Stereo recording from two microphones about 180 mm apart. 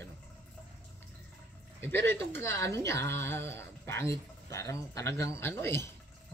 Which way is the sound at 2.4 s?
15° left (ahead or behind).